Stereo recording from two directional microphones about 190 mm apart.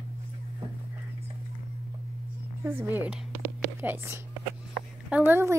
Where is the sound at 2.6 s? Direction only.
10° right (ahead or behind).